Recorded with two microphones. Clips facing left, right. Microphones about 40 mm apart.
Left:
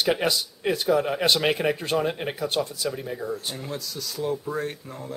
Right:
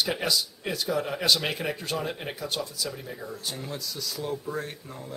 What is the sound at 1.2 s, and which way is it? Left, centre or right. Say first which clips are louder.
Speech: left 4 dB; left.